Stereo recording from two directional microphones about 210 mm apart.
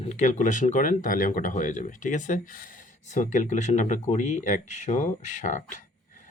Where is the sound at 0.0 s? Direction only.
35° left (ahead or behind).